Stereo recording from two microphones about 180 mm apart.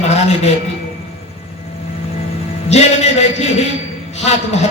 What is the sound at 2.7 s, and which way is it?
A woman's voice, 35° left (ahead or behind).